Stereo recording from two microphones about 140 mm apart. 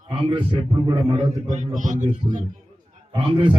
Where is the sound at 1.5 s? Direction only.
60° right (ahead or behind).